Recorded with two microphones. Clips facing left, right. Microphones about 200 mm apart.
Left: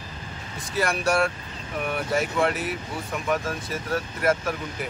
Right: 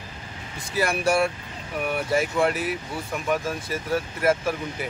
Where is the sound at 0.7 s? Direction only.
10° right (ahead or behind).